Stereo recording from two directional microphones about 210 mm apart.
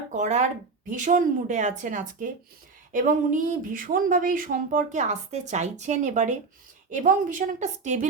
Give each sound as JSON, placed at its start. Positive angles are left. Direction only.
{"t": 0.1, "sound": "speech", "side_deg": -35}